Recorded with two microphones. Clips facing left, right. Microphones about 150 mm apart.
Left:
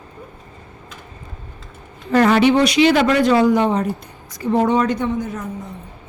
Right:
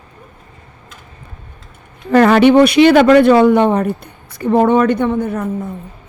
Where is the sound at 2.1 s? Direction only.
60° right (ahead or behind).